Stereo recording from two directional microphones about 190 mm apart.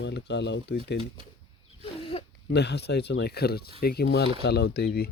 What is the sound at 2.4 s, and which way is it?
Speech, 60° left (ahead or behind).